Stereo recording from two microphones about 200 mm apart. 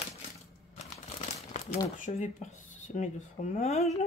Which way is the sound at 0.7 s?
35° left (ahead or behind).